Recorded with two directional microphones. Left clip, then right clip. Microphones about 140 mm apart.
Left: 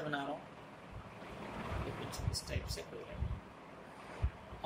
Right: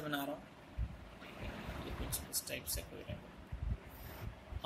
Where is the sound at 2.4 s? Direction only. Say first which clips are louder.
Right 1 dB; 55° right (ahead or behind).